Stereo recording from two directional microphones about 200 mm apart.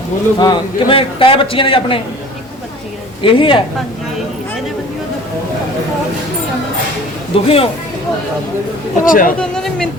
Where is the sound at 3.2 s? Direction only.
25° left (ahead or behind).